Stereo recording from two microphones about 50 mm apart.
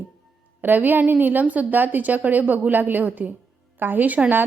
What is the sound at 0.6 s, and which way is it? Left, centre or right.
A woman's voice, right.